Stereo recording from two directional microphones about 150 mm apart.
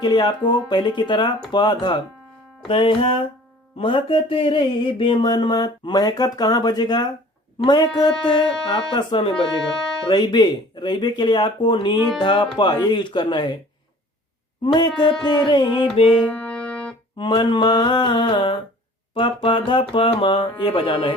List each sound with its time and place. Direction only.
0.0 s a sound: 30° left (ahead or behind)
2.6 s speech: 35° left (ahead or behind)
3.8 s a sound: 35° left (ahead or behind)
8.2 s speech: 30° left (ahead or behind)
8.9 s a sound: 30° left (ahead or behind)
12.2 s speech: 30° left (ahead or behind)
14.6 s speech: 30° left (ahead or behind)
16.3 s music: 10° left (ahead or behind)
17.2 s speech: 30° left (ahead or behind)